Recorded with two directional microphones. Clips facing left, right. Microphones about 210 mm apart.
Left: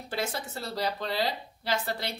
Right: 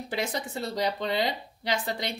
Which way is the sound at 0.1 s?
15° right (ahead or behind).